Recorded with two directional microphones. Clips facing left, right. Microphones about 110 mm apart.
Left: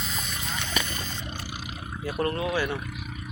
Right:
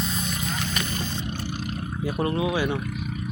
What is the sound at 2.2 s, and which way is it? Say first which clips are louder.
Speech: right 2 dB; 15° right (ahead or behind).